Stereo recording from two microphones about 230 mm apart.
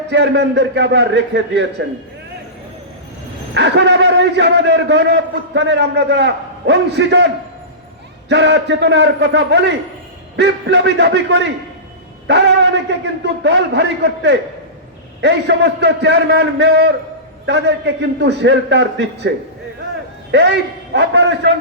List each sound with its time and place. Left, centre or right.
0.1 s a man's voice: right
3.5 s a man's voice: right
8.3 s a man's voice: right
20.3 s a man's voice: right